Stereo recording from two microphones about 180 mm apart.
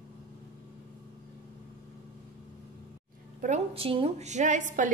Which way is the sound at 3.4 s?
35° right (ahead or behind).